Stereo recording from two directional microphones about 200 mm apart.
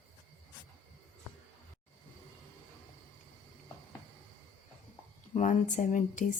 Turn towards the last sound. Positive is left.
turn(degrees=40)  # may be behind; listen again after turning